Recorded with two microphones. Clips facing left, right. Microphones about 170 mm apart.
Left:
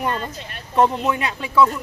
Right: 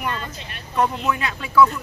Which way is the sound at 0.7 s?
25° left (ahead or behind).